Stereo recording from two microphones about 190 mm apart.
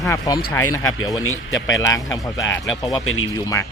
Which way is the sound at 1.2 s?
90° left.